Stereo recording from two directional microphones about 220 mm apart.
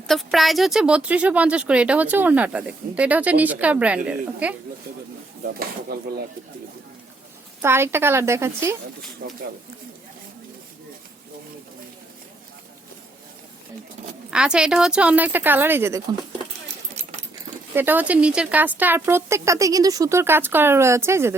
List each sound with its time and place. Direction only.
0.1 s speech: centre (ahead or behind)
5.5 s speech: 45° right (ahead or behind)
7.6 s speech: 10° right (ahead or behind)
9.2 s speech: 40° right (ahead or behind)
14.3 s speech: 5° right (ahead or behind)
16.9 s keys jangling: 30° right (ahead or behind)
17.7 s speech: 10° right (ahead or behind)